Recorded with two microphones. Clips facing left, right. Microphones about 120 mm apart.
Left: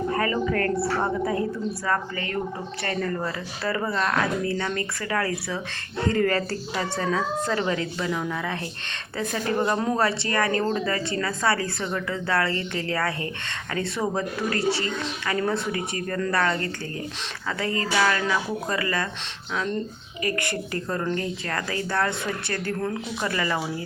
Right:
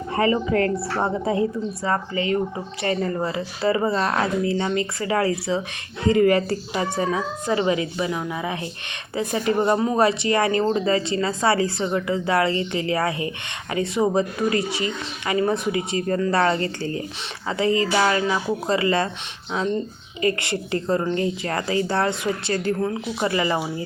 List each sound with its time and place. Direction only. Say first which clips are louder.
0.1 s speech: right 8 dB; 25° right (ahead or behind)
6.1 s speech: right 6 dB; 15° right (ahead or behind)
9.7 s speech: right 3 dB; 5° right (ahead or behind)
10.0 s speech: right 5 dB; 20° right (ahead or behind)
20.2 s speech: right 5 dB; 20° right (ahead or behind)